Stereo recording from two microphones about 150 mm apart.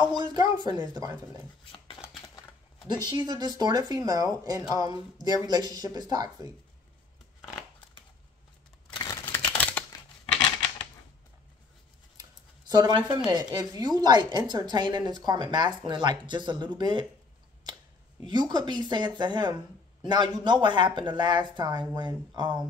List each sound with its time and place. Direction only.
0.1 s speech: 30° right (ahead or behind)
3.1 s speech: 30° right (ahead or behind)
8.9 s a sound: 30° left (ahead or behind)
9.2 s a sound: 15° left (ahead or behind)
9.8 s scissors: 10° left (ahead or behind)
12.2 s speech: 25° right (ahead or behind)
18.2 s speech: 25° right (ahead or behind)